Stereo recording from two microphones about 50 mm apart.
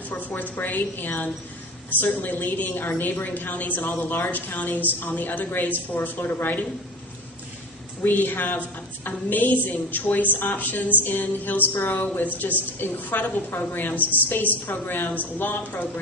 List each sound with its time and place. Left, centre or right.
0.1 s a woman's voice: left
8.0 s a woman's voice: left